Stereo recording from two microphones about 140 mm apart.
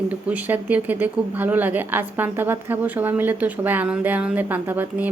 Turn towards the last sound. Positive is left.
turn(degrees=-10)  # may be behind; listen again after turning